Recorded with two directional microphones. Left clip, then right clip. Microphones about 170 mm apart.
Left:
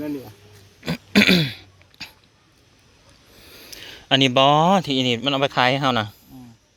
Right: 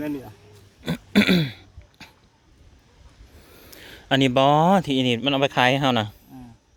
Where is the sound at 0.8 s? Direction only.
5° right (ahead or behind).